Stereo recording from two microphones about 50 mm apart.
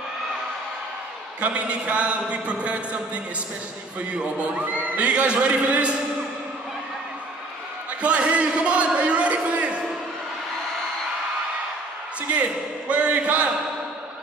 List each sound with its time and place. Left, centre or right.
1.4 s a man's voice: right
4.0 s a man's voice: right
8.0 s a man's voice: right
12.2 s a man's voice: right